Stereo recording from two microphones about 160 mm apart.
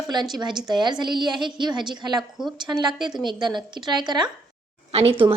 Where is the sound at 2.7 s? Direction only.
30° right (ahead or behind).